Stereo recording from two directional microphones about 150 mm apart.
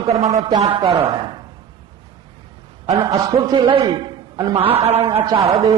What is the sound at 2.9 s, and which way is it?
A man's voice, 25° right (ahead or behind).